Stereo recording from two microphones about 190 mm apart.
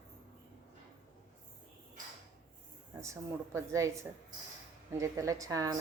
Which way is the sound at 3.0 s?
15° right (ahead or behind).